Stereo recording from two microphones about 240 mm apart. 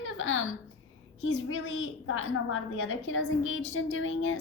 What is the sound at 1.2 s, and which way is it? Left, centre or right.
A woman's voice, left.